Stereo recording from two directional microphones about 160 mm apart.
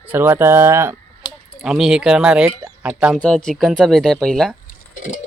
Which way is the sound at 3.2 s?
5° left (ahead or behind).